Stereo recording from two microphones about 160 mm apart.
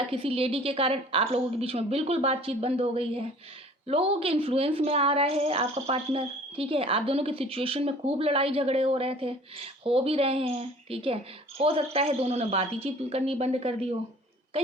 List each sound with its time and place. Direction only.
0.1 s a woman's voice: 35° right (ahead or behind)